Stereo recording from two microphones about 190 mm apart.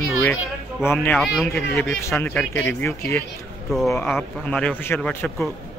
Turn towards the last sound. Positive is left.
turn(degrees=5)  # may be behind; listen again after turning